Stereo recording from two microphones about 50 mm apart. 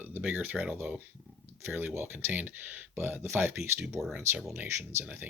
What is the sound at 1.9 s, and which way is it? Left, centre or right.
Speech, right.